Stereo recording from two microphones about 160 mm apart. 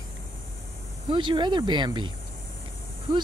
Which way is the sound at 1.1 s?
30° right (ahead or behind).